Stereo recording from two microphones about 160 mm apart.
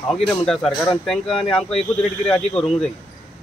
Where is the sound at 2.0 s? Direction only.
5° left (ahead or behind).